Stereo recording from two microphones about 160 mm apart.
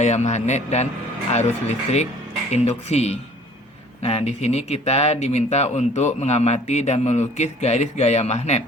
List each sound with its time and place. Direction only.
0.0 s speech: 45° left (ahead or behind)